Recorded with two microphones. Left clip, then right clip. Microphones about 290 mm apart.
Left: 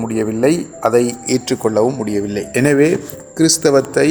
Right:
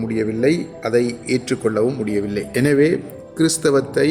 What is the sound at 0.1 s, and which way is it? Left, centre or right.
Speech, centre.